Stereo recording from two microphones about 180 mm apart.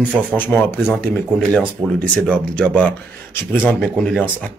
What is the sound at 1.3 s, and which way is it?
Speech, centre (ahead or behind).